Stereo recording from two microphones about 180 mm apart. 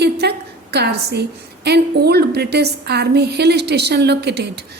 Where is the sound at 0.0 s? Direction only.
65° right (ahead or behind).